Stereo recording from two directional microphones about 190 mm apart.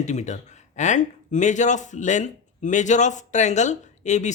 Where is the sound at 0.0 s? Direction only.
35° left (ahead or behind).